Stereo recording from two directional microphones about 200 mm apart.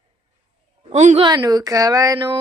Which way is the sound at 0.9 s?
35° right (ahead or behind).